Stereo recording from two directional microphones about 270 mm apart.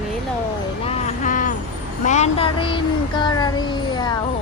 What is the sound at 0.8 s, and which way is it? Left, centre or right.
Speech, left.